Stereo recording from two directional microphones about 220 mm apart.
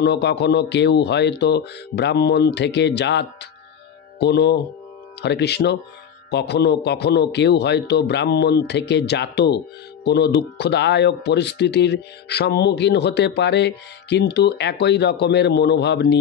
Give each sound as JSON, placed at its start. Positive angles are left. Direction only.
{"t": 0.0, "sound": "speech", "side_deg": 50}